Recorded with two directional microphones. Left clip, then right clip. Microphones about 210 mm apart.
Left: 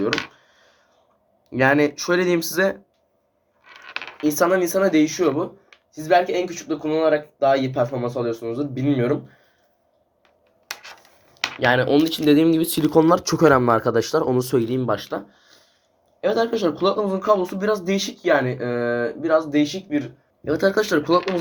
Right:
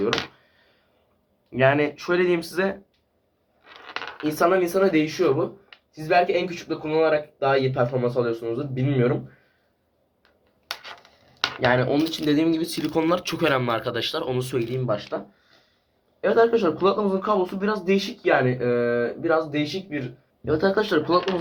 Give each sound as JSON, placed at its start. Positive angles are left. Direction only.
{"t": 1.5, "sound": "speech", "side_deg": 45}
{"t": 4.4, "sound": "speech", "side_deg": 45}
{"t": 11.6, "sound": "speech", "side_deg": 35}